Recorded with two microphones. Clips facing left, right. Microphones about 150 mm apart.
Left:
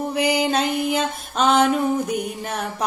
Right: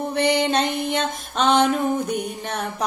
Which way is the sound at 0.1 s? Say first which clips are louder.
Right 1 dB; 5° left (ahead or behind).